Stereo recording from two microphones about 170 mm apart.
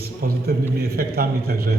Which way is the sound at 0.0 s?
65° right (ahead or behind).